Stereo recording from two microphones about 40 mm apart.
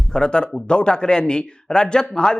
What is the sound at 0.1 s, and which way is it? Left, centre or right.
A man's voice, left.